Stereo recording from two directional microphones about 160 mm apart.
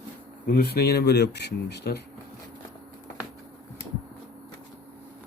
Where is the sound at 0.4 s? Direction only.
75° left (ahead or behind); by 2.0 s 90° left.